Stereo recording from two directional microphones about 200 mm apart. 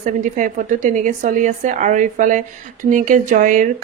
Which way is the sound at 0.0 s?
40° right (ahead or behind).